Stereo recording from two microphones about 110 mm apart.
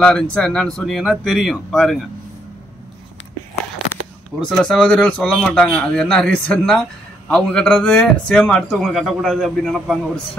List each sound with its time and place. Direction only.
0.0 s a man's voice: 10° left (ahead or behind)
4.5 s a man's voice: 5° left (ahead or behind)